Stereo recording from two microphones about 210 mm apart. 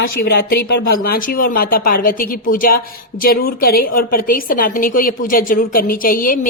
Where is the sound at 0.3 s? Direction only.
50° left (ahead or behind).